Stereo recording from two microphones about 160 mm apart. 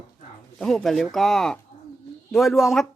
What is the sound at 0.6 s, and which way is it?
Speech, 5° left (ahead or behind).